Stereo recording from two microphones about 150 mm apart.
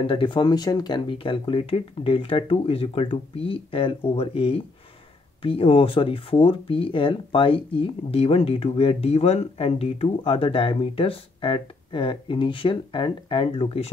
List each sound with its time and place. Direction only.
0.0 s speech: 35° left (ahead or behind)